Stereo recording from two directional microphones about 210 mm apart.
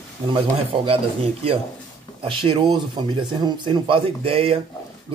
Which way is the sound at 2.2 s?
25° right (ahead or behind).